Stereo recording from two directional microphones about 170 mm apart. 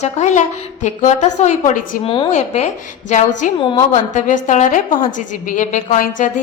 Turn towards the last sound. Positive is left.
turn(degrees=45)  # may be behind; listen again after turning